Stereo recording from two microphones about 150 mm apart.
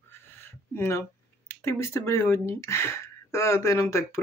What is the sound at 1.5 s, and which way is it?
Speech, 15° left (ahead or behind).